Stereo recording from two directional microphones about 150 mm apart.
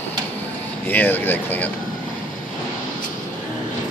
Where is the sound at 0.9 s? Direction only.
10° left (ahead or behind).